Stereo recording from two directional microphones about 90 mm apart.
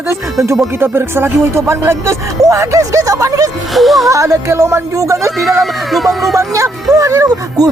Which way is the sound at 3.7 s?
Centre (ahead or behind).